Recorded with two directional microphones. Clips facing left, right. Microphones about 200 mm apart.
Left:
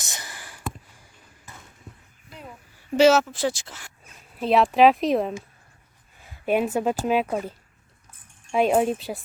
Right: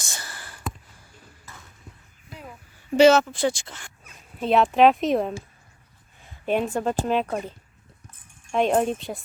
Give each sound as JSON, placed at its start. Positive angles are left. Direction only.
{"t": 0.0, "sound": "a sound", "side_deg": 20}
{"t": 2.9, "sound": "speech", "side_deg": 5}
{"t": 6.4, "sound": "speech", "side_deg": 5}
{"t": 8.5, "sound": "speech", "side_deg": 5}